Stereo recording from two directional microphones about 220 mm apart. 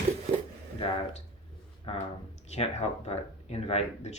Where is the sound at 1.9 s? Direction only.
25° left (ahead or behind).